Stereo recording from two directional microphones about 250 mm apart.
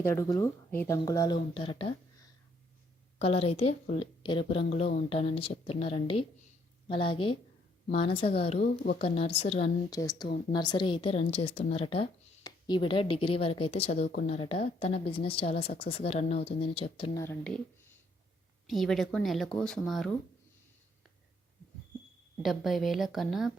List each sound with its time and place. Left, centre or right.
0.0 s speech: centre
3.2 s a woman's voice: left
8.5 s speech: left
9.0 s a woman's voice: left
17.2 s speech: centre
18.7 s speech: centre
22.4 s speech: centre